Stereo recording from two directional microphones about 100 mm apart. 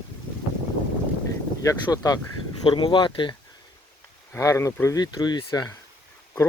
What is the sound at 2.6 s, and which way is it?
Speech, 50° left (ahead or behind).